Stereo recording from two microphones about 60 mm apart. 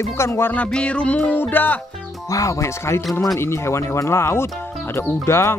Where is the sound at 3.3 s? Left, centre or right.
Left.